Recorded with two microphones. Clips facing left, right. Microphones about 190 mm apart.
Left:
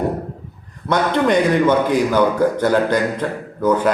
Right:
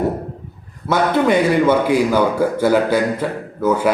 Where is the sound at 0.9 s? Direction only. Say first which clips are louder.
Right 1 dB; 5° right (ahead or behind).